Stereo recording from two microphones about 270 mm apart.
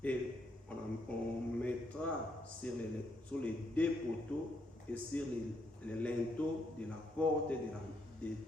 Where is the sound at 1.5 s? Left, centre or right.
Centre.